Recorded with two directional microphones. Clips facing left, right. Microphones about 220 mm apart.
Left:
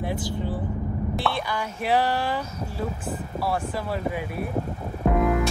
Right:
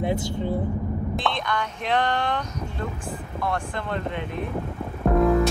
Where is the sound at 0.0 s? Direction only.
20° right (ahead or behind).